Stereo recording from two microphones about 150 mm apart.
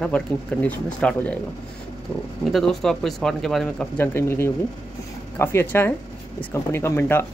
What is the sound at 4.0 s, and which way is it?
Speech, 15° left (ahead or behind).